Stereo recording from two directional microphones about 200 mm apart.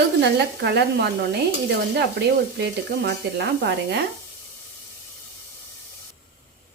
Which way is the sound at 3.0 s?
55° right (ahead or behind).